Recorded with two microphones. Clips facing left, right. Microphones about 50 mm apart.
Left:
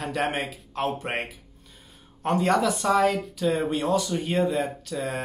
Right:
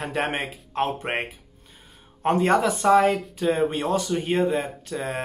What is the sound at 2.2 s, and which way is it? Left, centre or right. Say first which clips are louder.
Speech: right 2 dB; right.